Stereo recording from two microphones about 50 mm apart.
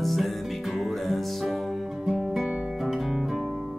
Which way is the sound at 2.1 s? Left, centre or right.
Centre.